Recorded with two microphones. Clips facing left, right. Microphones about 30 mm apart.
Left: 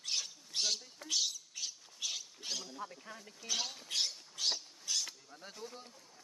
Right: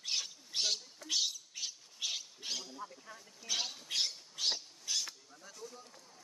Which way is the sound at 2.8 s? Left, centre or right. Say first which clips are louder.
Left 2 dB; left.